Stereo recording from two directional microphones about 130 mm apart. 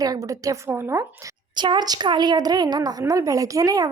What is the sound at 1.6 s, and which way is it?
A woman's voice, 35° right (ahead or behind).